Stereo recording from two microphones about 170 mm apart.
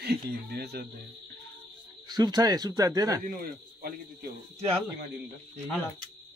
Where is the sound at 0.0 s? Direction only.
70° right (ahead or behind).